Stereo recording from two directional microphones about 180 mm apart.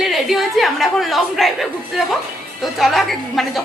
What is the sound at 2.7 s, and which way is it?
Speech, centre (ahead or behind).